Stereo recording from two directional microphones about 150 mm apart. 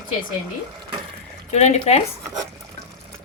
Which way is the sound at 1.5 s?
50° left (ahead or behind).